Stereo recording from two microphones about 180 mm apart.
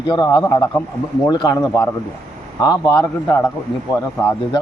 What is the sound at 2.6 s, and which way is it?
Speech, 15° left (ahead or behind).